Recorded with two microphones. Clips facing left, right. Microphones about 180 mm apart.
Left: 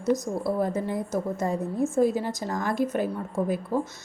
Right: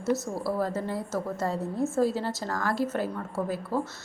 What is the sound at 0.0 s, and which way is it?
A woman's voice, 20° left (ahead or behind).